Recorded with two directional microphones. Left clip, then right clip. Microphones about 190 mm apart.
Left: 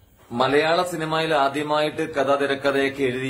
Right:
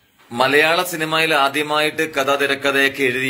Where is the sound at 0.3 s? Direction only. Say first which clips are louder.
Right 4 dB; centre (ahead or behind).